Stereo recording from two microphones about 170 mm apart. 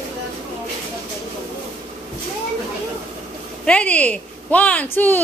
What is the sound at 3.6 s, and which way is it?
A woman's voice, 5° left (ahead or behind).